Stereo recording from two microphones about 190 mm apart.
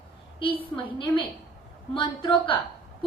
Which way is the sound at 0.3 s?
25° left (ahead or behind).